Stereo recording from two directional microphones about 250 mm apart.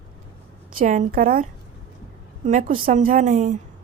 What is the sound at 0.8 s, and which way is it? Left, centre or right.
Speech, right.